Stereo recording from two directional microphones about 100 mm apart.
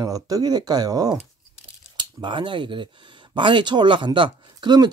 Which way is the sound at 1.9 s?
55° right (ahead or behind).